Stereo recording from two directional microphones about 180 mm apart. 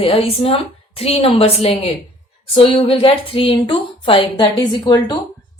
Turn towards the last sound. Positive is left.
turn(degrees=25)  # may be behind; listen again after turning